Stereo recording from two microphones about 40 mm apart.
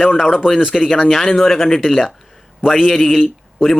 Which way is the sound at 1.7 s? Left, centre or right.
Centre.